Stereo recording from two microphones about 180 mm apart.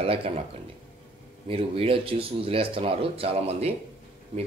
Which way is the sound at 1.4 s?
30° right (ahead or behind).